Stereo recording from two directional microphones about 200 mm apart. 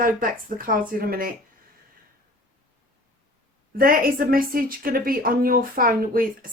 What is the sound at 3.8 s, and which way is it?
A woman's voice, 45° right (ahead or behind).